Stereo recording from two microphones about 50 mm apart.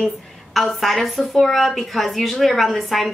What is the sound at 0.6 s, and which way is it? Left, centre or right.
A woman's voice, centre.